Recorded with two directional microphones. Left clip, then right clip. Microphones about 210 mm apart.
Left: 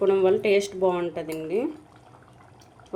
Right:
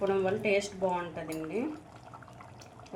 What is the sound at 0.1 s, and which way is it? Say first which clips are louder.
Speech: left 8 dB; 45° left (ahead or behind).